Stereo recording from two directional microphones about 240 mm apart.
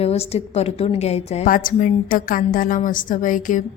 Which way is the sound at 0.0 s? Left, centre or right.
Left.